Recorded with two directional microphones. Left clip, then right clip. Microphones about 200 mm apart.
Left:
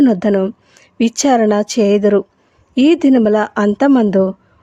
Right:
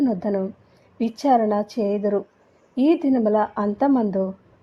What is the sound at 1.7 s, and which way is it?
Speech, 65° left (ahead or behind).